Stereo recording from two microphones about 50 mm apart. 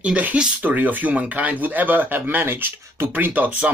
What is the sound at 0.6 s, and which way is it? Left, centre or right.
Speech, right.